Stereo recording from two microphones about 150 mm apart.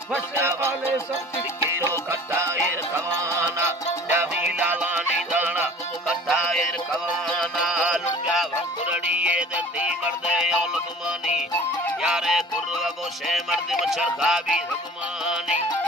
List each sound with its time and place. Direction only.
0.1 s music: 15° right (ahead or behind)
1.9 s music: 20° right (ahead or behind)
6.2 s music: centre (ahead or behind)